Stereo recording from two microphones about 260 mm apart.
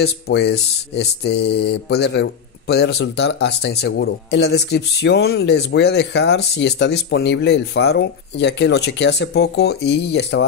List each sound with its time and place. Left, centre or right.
0.0 s mantra: left